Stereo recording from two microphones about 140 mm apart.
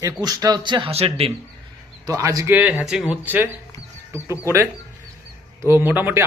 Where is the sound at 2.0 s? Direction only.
25° right (ahead or behind).